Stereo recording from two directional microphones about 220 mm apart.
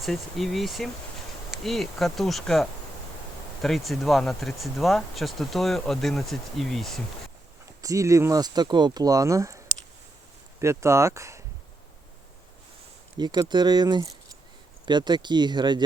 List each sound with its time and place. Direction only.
0.0 s speech: centre (ahead or behind)
7.8 s speech: 15° right (ahead or behind)
10.6 s speech: 15° right (ahead or behind)
13.1 s speech: 20° right (ahead or behind)